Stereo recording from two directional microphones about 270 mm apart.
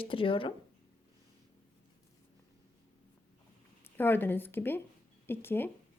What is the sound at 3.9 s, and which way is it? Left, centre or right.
A woman's voice, centre.